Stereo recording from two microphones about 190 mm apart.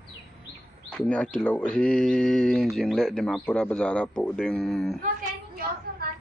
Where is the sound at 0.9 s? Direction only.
5° left (ahead or behind).